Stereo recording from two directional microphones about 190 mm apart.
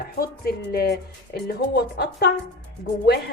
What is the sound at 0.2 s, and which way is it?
Speech, 55° left (ahead or behind).